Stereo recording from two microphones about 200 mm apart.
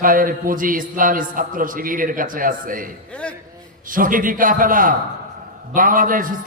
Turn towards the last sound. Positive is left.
turn(degrees=-45)  # may be behind; listen again after turning